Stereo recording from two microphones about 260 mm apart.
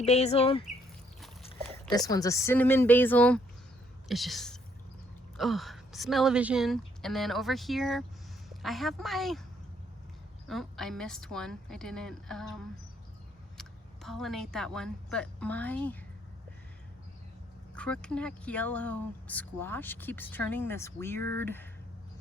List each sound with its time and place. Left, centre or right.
0.0 s speech: left; by 9.4 s centre
10.5 s speech: centre
13.6 s speech: centre
17.7 s speech: centre